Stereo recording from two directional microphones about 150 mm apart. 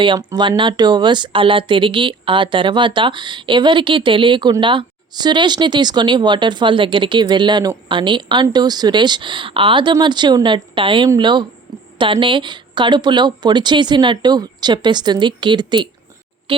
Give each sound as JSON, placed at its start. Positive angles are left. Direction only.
{"t": 0.0, "sound": "speech", "side_deg": -30}